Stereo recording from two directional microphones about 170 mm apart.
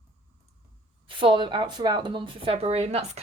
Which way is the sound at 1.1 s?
30° right (ahead or behind).